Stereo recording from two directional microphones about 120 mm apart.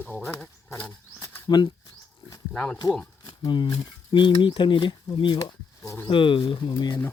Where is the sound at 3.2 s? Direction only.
40° left (ahead or behind).